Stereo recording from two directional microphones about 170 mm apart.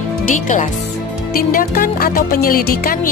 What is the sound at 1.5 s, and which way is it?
Music, 60° left (ahead or behind).